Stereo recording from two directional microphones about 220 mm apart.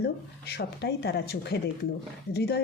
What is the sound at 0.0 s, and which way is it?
Speech, 45° left (ahead or behind).